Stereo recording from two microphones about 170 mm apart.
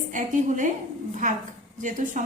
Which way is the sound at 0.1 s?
50° right (ahead or behind).